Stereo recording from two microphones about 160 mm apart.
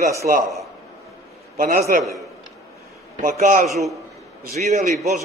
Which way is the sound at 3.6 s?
Centre (ahead or behind).